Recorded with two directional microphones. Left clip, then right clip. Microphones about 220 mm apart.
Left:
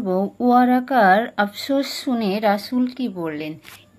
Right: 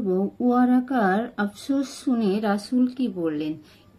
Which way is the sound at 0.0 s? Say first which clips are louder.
Left 4 dB; 35° left (ahead or behind).